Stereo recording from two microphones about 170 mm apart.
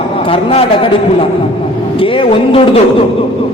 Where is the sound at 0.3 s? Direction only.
35° left (ahead or behind).